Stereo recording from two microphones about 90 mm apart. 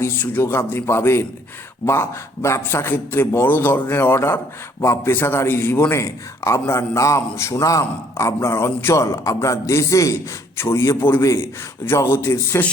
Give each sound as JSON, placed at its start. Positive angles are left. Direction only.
{"t": 0.0, "sound": "a man's voice", "side_deg": 25}